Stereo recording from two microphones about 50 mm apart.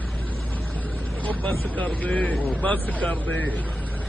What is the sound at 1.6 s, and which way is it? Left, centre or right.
A man's voice, left.